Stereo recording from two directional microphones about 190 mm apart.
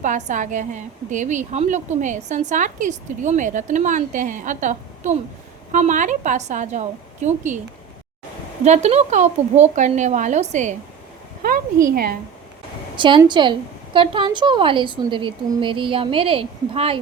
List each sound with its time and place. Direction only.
0.0 s a woman's voice: 40° right (ahead or behind)
8.6 s a woman's voice: 35° right (ahead or behind)
11.4 s speech: 55° right (ahead or behind)
13.0 s a woman's voice: 25° right (ahead or behind)